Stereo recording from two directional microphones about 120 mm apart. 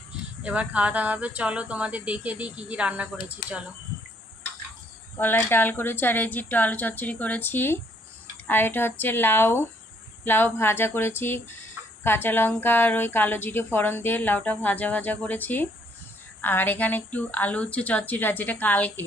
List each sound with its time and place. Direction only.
0.4 s speech: 10° right (ahead or behind)
5.2 s a woman's voice: 15° left (ahead or behind)